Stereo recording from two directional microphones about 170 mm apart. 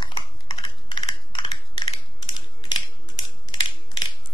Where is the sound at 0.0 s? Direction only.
25° left (ahead or behind).